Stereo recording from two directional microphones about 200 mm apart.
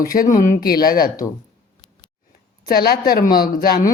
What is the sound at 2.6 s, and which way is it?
Speech, 50° left (ahead or behind).